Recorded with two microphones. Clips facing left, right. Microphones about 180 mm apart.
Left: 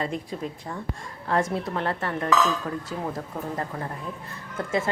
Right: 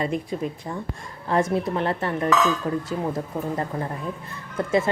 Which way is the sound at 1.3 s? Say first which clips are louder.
Right 3 dB; 20° right (ahead or behind).